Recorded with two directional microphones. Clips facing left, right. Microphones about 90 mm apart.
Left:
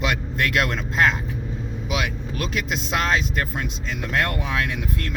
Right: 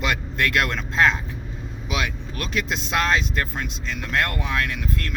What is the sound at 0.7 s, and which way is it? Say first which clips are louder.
Speech: even; 10° left (ahead or behind).